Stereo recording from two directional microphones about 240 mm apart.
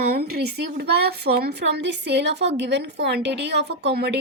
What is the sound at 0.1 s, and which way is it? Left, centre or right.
A woman's voice, right.